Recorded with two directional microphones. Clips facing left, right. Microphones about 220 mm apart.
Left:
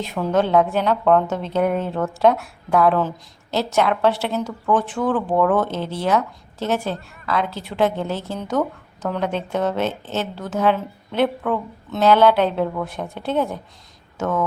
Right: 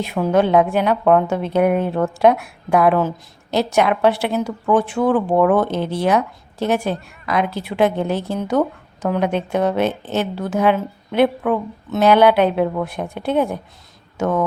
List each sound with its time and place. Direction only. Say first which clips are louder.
0.0 s a woman's voice: right 3 dB; 10° right (ahead or behind)